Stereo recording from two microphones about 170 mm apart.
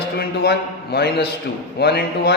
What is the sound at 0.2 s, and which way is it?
A man's voice, 70° left (ahead or behind).